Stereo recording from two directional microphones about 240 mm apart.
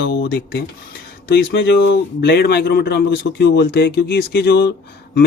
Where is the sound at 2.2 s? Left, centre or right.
Left.